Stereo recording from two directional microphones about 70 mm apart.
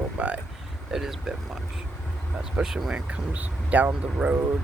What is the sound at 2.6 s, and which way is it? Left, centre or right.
Speech, centre.